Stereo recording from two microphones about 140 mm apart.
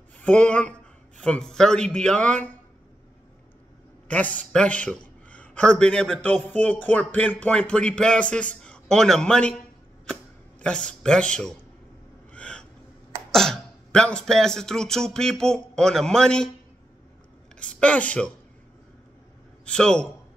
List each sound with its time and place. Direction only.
0.2 s a man's voice: 10° left (ahead or behind)
4.1 s a man's voice: 10° left (ahead or behind)
10.6 s a man's voice: 5° left (ahead or behind)
12.3 s gasp: 10° left (ahead or behind)
13.3 s speech: 5° left (ahead or behind)
17.6 s speech: 10° left (ahead or behind)
19.6 s a man's voice: 5° left (ahead or behind)